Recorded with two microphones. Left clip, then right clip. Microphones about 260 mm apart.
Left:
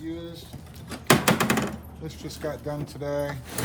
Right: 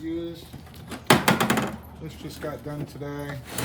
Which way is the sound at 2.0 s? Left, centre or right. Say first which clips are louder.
Left 1 dB; centre.